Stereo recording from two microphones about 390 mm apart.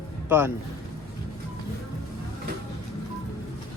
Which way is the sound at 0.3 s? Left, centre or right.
Centre.